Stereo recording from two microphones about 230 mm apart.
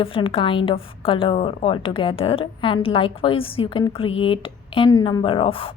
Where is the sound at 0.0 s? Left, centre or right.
Left.